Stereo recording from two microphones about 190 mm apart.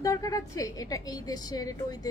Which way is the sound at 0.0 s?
15° left (ahead or behind).